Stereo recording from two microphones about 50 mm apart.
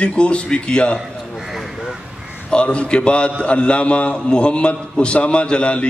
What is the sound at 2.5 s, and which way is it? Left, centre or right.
A man's voice, left.